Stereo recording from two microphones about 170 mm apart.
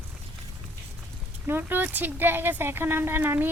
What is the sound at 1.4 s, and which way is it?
A woman's voice, 10° right (ahead or behind).